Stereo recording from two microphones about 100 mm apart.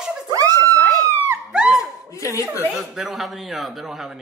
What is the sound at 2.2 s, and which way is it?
Speech, 30° left (ahead or behind).